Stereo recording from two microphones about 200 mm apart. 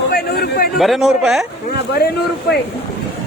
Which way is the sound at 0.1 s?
50° left (ahead or behind).